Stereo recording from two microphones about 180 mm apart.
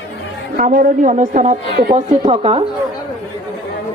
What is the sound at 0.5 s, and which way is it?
A woman's voice, 50° right (ahead or behind).